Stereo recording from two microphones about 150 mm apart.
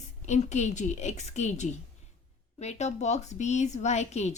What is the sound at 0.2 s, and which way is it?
A woman's voice, 50° left (ahead or behind).